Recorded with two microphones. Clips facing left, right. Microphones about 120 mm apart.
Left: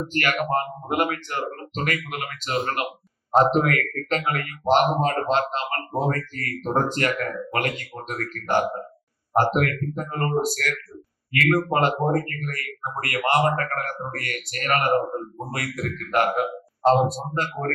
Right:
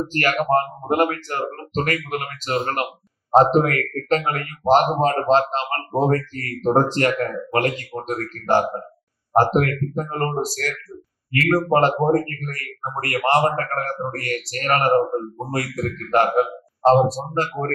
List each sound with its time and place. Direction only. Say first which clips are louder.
0.0 s speech: right 3 dB; 35° right (ahead or behind)